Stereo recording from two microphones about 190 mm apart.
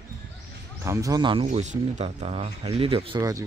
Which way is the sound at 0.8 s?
15° right (ahead or behind).